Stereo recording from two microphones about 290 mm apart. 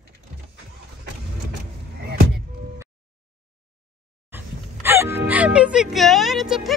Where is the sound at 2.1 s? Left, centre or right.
Right.